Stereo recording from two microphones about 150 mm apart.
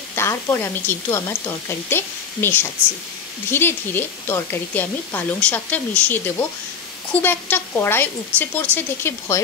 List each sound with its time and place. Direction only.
0.1 s speech: 15° left (ahead or behind)